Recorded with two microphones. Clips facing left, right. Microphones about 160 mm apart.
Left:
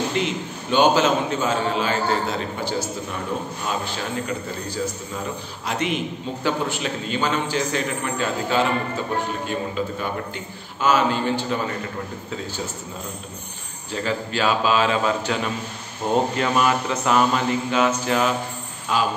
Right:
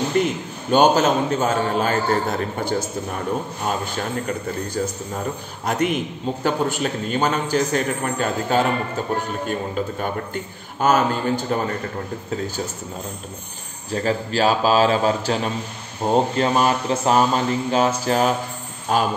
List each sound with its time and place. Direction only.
0.2 s a man's voice: 45° right (ahead or behind)
13.9 s mantra: 40° right (ahead or behind)
18.9 s a man's voice: 45° right (ahead or behind)